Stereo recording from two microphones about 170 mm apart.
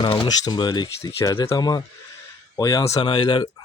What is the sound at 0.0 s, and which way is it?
Speech, 30° left (ahead or behind).